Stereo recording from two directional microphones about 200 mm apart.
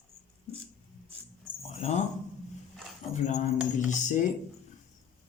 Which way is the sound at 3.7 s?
40° left (ahead or behind).